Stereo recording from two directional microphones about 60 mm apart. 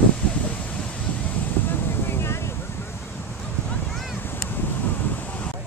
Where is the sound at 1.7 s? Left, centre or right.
Left.